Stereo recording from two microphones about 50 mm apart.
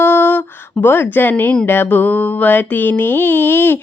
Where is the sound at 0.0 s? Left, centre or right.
Left.